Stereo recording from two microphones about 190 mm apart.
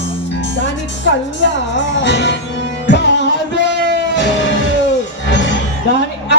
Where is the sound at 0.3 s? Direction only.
70° left (ahead or behind).